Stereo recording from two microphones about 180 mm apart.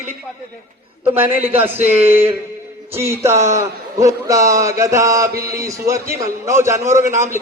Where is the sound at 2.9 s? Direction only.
15° right (ahead or behind).